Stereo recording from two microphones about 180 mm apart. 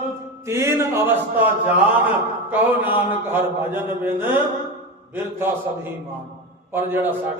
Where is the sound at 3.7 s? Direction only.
10° right (ahead or behind).